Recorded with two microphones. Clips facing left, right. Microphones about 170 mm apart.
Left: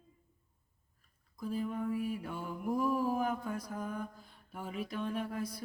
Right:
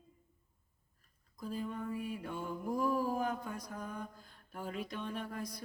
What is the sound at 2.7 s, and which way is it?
Mantra, 5° left (ahead or behind).